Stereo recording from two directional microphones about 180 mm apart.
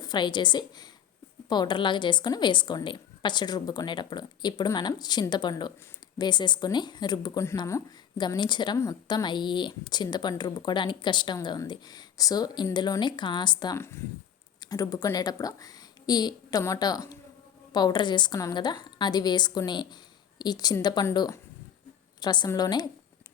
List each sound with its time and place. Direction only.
0.0 s speech: 25° left (ahead or behind)